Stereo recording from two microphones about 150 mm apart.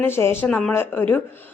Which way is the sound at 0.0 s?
15° left (ahead or behind).